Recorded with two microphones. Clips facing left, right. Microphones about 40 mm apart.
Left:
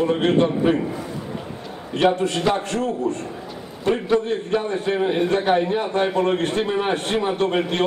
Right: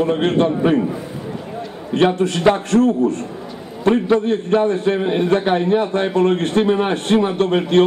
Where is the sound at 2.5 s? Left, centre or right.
Right.